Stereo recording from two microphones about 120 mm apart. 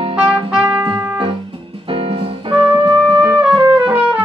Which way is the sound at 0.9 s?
45° right (ahead or behind).